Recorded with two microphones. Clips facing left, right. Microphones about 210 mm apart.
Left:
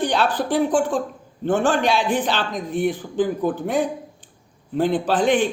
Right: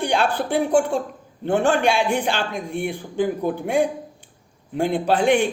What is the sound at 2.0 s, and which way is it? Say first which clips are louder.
Speech: even; 10° right (ahead or behind).